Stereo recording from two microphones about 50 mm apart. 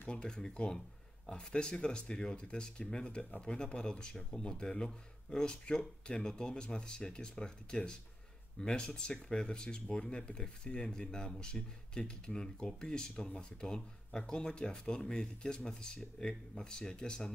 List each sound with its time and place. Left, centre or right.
0.1 s speech: centre